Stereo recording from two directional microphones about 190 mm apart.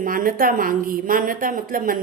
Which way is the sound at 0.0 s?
45° right (ahead or behind).